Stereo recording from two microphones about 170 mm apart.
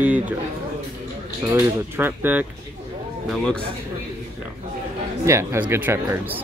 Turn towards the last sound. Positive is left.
turn(degrees=-15)  # may be behind; listen again after turning